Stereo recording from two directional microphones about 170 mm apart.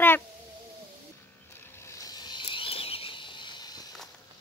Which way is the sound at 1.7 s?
20° left (ahead or behind).